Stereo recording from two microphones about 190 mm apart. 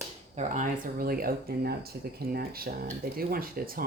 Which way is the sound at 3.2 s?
50° right (ahead or behind).